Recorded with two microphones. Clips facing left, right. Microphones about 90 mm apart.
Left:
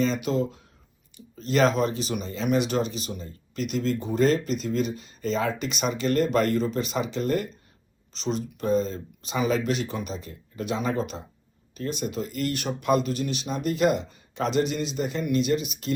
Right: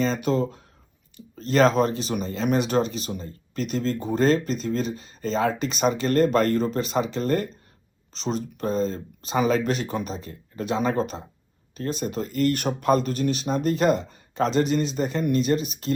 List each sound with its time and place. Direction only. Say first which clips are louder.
0.0 s speech: right 1 dB; 40° right (ahead or behind)